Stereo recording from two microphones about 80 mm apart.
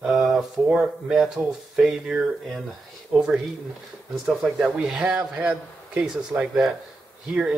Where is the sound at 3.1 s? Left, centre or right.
Right.